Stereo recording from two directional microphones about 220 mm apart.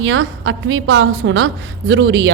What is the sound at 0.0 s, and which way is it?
A woman's voice, 60° right (ahead or behind).